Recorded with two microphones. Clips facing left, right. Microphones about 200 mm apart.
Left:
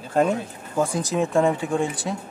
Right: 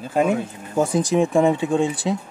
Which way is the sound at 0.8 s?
15° right (ahead or behind).